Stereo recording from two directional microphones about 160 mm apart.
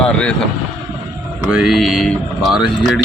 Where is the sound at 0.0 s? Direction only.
5° left (ahead or behind).